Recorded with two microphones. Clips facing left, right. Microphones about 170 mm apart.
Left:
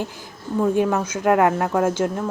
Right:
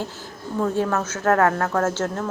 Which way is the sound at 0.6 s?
15° left (ahead or behind).